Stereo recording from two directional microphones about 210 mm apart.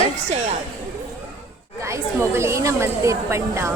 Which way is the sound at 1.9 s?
15° right (ahead or behind).